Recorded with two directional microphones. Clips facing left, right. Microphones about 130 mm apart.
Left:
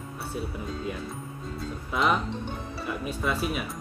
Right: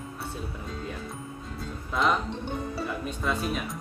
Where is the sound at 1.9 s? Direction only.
5° left (ahead or behind).